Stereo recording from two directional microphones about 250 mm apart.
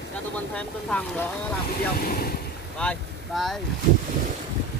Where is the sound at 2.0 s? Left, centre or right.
Left.